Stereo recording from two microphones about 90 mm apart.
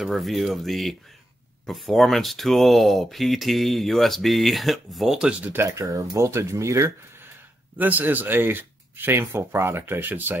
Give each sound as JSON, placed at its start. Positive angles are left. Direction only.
{"t": 0.0, "sound": "speech", "side_deg": 0}
{"t": 5.4, "sound": "speech", "side_deg": -25}
{"t": 5.7, "sound": "speech", "side_deg": -40}
{"t": 7.7, "sound": "speech", "side_deg": -20}